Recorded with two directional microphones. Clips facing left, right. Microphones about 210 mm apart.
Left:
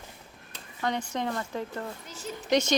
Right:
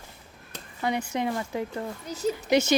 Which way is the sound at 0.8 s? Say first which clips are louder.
Right 3 dB; 10° right (ahead or behind).